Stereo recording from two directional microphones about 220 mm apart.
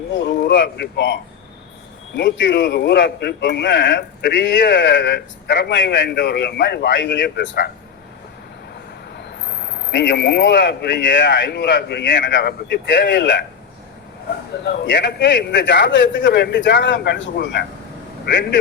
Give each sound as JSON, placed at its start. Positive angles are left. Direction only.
{"t": 0.1, "sound": "a man's voice", "side_deg": 50}
{"t": 9.1, "sound": "a man's voice", "side_deg": 45}
{"t": 14.6, "sound": "a man's voice", "side_deg": 50}